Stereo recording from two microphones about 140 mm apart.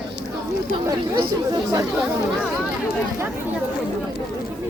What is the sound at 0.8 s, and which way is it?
Speech, 30° right (ahead or behind).